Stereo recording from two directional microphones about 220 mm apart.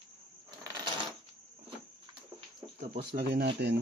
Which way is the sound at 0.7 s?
20° right (ahead or behind).